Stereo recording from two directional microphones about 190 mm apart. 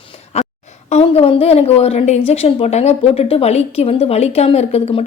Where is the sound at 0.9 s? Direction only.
35° left (ahead or behind).